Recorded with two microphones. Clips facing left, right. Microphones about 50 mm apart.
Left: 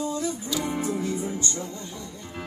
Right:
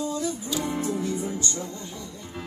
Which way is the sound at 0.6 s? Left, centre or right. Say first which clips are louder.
Even; centre.